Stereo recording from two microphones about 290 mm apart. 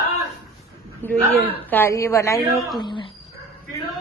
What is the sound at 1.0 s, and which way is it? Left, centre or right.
A woman's voice, centre.